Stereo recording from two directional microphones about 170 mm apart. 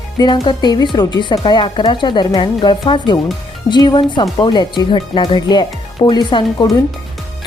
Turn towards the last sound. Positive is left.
turn(degrees=25)  # may be behind; listen again after turning